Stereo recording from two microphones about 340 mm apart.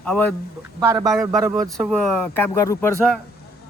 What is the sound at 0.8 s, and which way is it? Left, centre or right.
A man's voice, centre.